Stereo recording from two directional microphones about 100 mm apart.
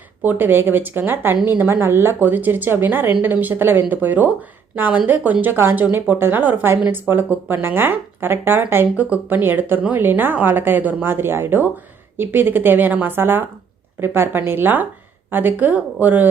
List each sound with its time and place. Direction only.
0.2 s a woman's voice: 20° right (ahead or behind)